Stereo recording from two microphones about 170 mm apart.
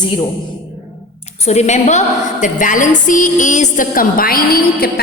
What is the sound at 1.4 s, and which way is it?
A woman's voice, 40° left (ahead or behind).